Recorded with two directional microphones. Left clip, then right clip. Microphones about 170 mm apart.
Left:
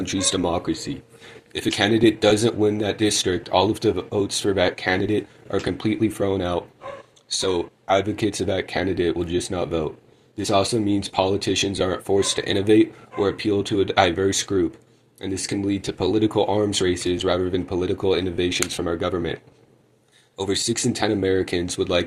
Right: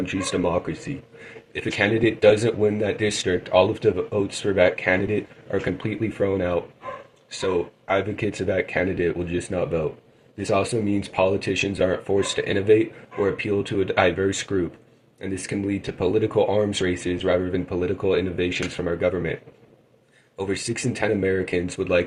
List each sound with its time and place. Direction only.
0.1 s speech: 40° left (ahead or behind)
7.9 s speech: 40° left (ahead or behind)
15.4 s speech: 45° left (ahead or behind)
20.3 s speech: 40° left (ahead or behind)